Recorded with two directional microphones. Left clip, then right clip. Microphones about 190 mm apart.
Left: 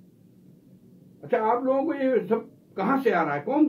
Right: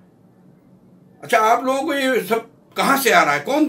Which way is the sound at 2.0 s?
20° right (ahead or behind).